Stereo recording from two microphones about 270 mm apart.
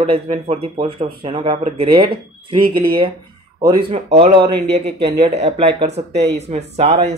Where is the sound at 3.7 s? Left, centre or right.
Centre.